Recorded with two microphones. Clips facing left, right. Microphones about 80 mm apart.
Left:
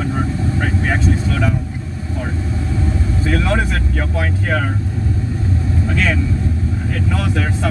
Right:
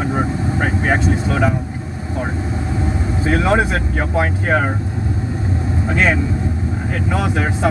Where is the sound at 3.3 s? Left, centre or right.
Right.